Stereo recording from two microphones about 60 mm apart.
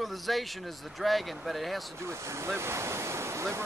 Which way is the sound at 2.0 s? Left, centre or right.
Right.